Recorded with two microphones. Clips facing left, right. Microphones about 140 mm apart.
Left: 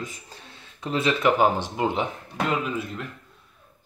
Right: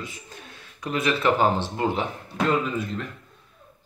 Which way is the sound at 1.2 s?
15° left (ahead or behind).